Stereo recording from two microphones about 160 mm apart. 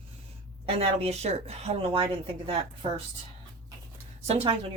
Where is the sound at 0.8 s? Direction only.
40° right (ahead or behind).